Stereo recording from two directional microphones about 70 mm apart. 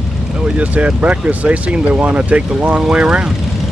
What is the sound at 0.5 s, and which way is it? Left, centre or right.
Speech, centre.